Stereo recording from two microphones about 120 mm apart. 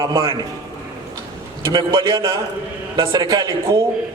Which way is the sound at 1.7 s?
35° right (ahead or behind).